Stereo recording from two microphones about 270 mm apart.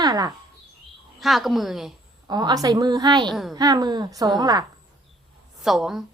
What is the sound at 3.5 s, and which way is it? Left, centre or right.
A woman's voice, centre.